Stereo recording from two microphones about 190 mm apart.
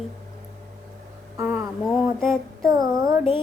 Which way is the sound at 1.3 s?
10° right (ahead or behind).